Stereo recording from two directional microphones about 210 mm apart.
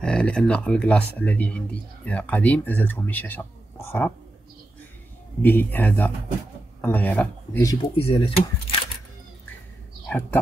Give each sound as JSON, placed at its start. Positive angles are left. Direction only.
{"t": 0.0, "sound": "speech", "side_deg": 5}
{"t": 5.4, "sound": "speech", "side_deg": 10}
{"t": 7.9, "sound": "speech", "side_deg": 25}
{"t": 10.0, "sound": "speech", "side_deg": 10}